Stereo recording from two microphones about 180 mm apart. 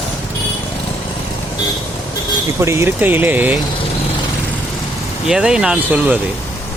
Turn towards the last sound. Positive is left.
turn(degrees=-5)  # may be behind; listen again after turning